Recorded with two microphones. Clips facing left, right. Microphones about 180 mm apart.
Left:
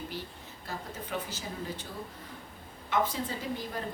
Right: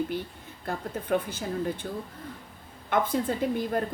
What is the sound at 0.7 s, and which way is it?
A woman's voice, 55° right (ahead or behind).